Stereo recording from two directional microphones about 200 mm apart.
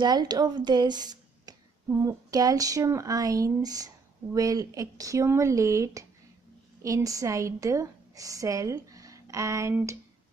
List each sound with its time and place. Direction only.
0.0 s a woman's voice: 20° right (ahead or behind)